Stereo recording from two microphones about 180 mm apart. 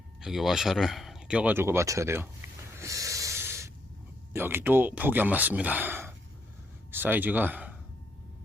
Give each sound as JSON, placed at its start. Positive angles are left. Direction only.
{"t": 0.2, "sound": "speech", "side_deg": 0}
{"t": 2.7, "sound": "a sound", "side_deg": -15}
{"t": 4.3, "sound": "speech", "side_deg": -10}